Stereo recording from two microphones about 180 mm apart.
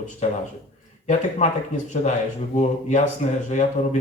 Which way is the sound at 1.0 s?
45° left (ahead or behind).